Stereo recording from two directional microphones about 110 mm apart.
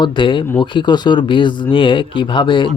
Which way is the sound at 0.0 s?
50° left (ahead or behind).